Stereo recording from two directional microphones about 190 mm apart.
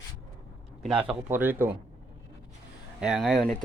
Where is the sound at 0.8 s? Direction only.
5° right (ahead or behind).